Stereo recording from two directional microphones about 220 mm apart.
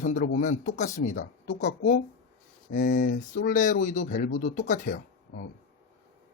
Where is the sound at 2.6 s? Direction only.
50° left (ahead or behind).